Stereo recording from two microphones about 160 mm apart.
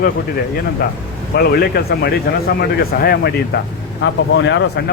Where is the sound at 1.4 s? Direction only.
75° left (ahead or behind).